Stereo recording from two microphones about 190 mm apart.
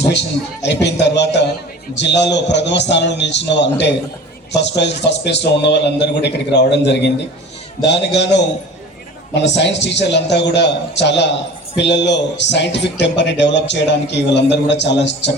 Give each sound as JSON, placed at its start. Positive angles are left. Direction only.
{"t": 0.0, "sound": "a man's voice", "side_deg": 65}